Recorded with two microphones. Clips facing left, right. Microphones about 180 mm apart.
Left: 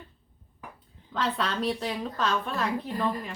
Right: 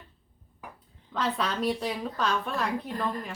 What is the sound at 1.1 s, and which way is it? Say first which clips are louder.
A woman's voice: even; centre (ahead or behind).